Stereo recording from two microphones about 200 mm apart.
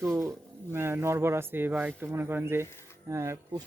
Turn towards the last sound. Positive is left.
turn(degrees=-15)  # may be behind; listen again after turning